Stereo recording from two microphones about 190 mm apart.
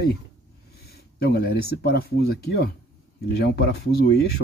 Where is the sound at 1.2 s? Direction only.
55° left (ahead or behind).